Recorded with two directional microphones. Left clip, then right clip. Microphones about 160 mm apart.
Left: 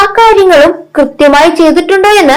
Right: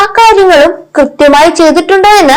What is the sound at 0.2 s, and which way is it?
Speech, 30° right (ahead or behind).